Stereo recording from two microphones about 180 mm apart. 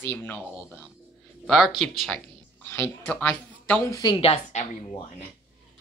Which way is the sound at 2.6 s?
10° left (ahead or behind).